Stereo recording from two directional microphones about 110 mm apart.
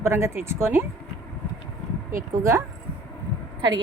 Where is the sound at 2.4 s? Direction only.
30° right (ahead or behind).